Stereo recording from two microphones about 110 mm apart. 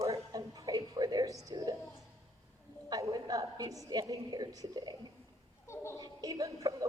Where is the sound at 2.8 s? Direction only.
35° right (ahead or behind).